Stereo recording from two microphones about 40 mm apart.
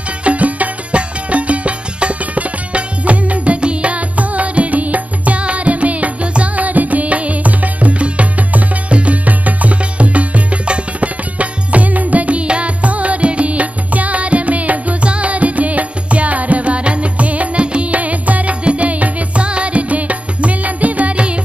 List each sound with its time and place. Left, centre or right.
0.2 s music: right